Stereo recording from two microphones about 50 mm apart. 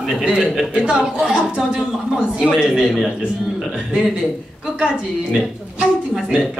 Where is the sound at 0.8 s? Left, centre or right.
Centre.